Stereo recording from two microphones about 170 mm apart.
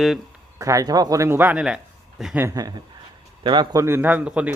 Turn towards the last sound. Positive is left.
turn(degrees=-10)  # may be behind; listen again after turning